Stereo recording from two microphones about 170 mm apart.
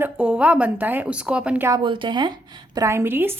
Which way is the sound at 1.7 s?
30° right (ahead or behind).